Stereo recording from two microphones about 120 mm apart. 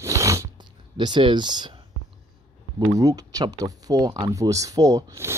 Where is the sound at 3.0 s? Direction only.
30° right (ahead or behind).